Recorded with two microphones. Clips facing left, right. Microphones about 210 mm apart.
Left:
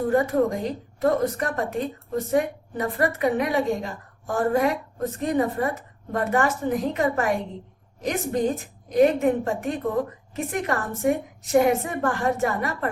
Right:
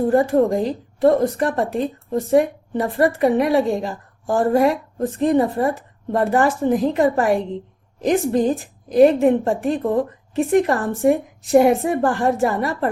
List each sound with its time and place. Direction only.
0.1 s a woman's voice: 30° right (ahead or behind)